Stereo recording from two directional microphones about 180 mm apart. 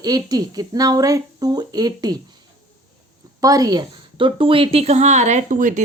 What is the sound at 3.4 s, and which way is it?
A woman's voice, 20° right (ahead or behind).